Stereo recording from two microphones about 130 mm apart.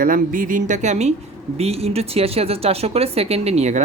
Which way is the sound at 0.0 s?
90° right.